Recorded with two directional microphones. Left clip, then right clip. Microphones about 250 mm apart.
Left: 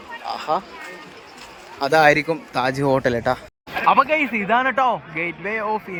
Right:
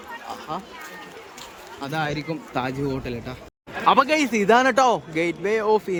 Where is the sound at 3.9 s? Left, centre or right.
Centre.